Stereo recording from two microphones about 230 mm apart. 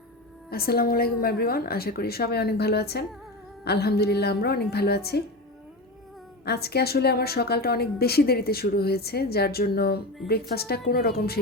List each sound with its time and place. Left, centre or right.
0.5 s a woman's voice: left
6.4 s a woman's voice: left